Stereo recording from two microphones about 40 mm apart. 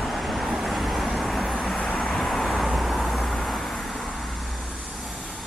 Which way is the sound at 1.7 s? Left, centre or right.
Left.